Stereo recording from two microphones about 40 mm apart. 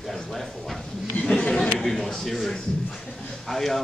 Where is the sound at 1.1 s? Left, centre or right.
Left.